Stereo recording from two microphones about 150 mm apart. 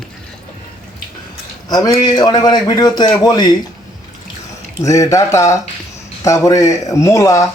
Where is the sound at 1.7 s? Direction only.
25° left (ahead or behind).